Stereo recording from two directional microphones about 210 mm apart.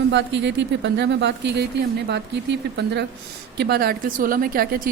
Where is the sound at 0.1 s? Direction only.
55° right (ahead or behind).